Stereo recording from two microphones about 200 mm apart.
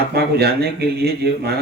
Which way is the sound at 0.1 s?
55° right (ahead or behind).